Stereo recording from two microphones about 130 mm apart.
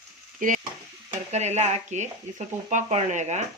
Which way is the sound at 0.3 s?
90° right.